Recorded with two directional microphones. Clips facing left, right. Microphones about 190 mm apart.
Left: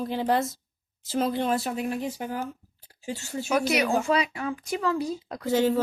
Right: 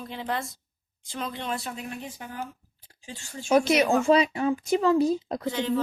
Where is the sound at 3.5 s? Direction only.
25° right (ahead or behind).